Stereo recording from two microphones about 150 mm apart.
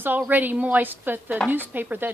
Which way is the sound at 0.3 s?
10° right (ahead or behind).